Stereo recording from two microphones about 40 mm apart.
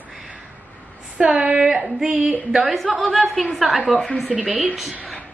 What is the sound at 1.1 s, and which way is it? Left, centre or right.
Speech, right.